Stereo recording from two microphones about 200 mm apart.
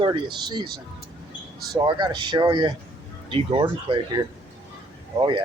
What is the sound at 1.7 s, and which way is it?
Speech, 20° right (ahead or behind).